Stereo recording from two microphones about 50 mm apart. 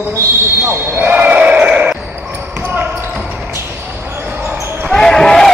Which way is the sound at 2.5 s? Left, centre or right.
Right.